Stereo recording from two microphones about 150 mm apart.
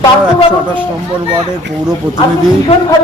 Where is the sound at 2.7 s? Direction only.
45° left (ahead or behind).